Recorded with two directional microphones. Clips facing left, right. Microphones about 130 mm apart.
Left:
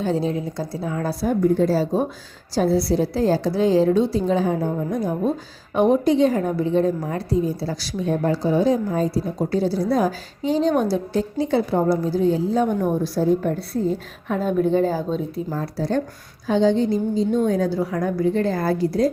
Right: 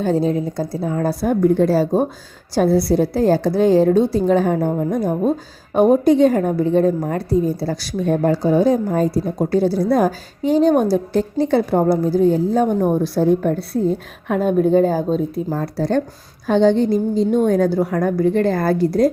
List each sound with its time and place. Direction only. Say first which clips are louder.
0.0 s a woman's voice: right 4 dB; 45° right (ahead or behind)
13.0 s a woman's voice: right 4 dB; 65° right (ahead or behind)
14.3 s a woman's voice: right 4 dB; 55° right (ahead or behind)